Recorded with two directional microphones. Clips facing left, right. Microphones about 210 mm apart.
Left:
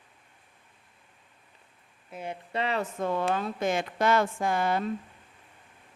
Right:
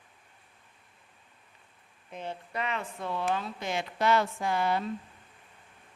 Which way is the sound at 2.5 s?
30° left (ahead or behind).